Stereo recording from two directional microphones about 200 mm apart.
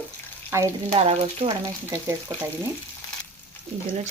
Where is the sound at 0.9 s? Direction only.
30° right (ahead or behind).